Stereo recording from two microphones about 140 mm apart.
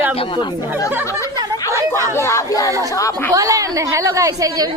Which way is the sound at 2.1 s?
20° left (ahead or behind).